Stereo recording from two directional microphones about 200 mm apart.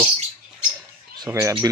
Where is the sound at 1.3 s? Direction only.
10° right (ahead or behind).